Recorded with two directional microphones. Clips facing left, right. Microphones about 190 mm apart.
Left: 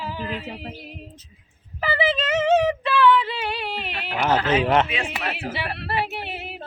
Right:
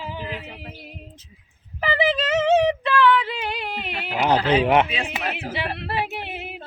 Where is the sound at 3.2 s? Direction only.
15° right (ahead or behind).